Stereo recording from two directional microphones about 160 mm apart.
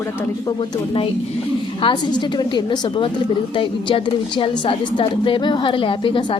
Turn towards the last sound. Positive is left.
turn(degrees=35)  # may be behind; listen again after turning